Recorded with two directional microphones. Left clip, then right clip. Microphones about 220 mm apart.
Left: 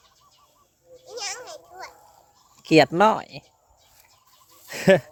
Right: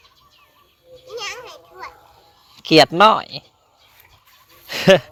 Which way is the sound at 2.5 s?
10° left (ahead or behind).